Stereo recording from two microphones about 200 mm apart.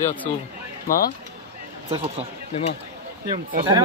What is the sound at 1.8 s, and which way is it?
Speech, 30° right (ahead or behind).